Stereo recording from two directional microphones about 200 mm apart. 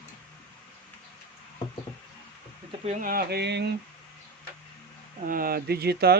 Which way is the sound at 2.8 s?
45° right (ahead or behind).